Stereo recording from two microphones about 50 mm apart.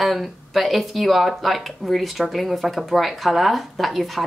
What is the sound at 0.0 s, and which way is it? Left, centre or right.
Speech, centre.